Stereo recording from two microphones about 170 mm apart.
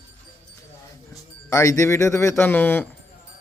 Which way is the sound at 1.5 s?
15° left (ahead or behind).